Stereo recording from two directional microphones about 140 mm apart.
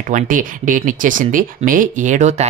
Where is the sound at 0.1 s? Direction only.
70° right (ahead or behind).